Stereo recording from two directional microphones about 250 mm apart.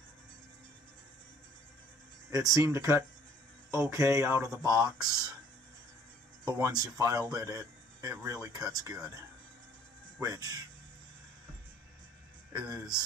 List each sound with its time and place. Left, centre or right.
2.3 s speech: centre
6.4 s speech: centre
12.5 s speech: centre